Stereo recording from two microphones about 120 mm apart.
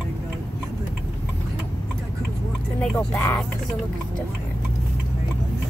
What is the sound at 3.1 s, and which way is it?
Speech, 25° left (ahead or behind).